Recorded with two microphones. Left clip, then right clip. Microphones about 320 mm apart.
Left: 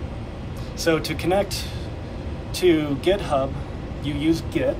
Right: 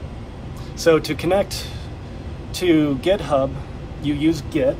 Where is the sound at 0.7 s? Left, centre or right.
Centre.